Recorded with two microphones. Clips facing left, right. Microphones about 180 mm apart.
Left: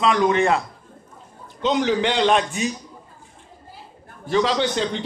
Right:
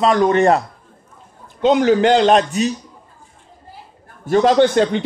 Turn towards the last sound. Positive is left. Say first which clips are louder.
# right 9 dB
turn(degrees=-55)  # may be behind; listen again after turning